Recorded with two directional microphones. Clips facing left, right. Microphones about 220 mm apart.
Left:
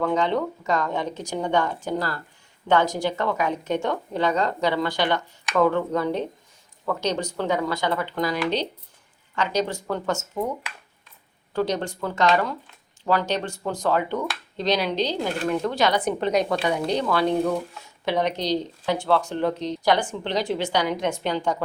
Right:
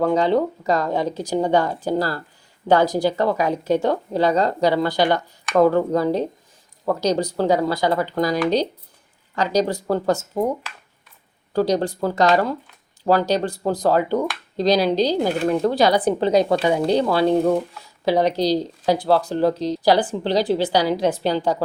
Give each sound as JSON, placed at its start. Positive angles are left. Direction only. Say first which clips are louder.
{"t": 0.0, "sound": "speech", "louder": "right 5 dB", "side_deg": -35}
{"t": 11.5, "sound": "speech", "louder": "right 5 dB", "side_deg": -35}